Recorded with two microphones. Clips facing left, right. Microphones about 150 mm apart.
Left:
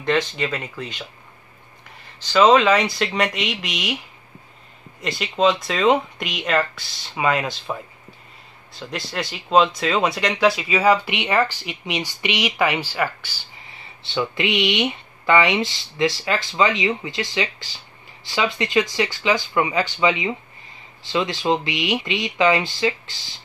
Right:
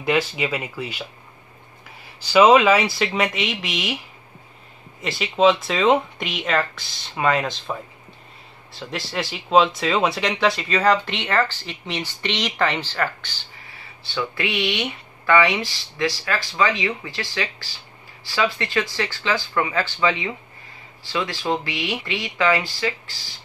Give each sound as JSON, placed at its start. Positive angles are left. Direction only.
{"t": 0.0, "sound": "speech", "side_deg": -10}
{"t": 2.0, "sound": "speech", "side_deg": -10}
{"t": 5.0, "sound": "speech", "side_deg": 0}
{"t": 13.7, "sound": "speech", "side_deg": 20}